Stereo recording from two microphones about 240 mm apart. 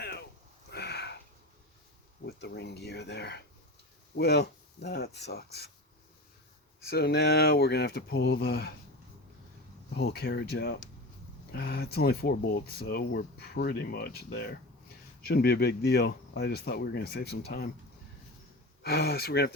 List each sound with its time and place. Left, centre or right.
0.0 s a sound: left
2.2 s speech: left
6.8 s speech: left
9.9 s speech: left
18.8 s speech: left